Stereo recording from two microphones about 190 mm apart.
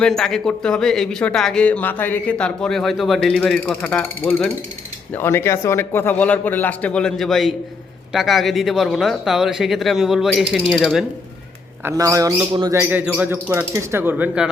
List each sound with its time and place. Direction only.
0.0 s a man's voice: centre (ahead or behind)
11.9 s speech: 15° right (ahead or behind)